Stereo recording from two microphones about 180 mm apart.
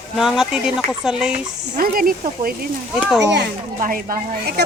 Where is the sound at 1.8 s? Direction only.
55° right (ahead or behind).